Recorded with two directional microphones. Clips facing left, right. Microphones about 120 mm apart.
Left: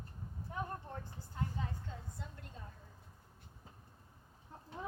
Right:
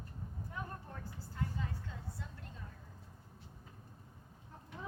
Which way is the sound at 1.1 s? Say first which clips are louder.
Right 1 dB; 30° left (ahead or behind).